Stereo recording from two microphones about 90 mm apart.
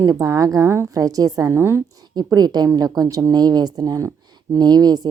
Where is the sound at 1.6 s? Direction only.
30° right (ahead or behind).